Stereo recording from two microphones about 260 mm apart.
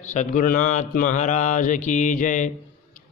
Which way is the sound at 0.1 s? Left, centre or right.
Left.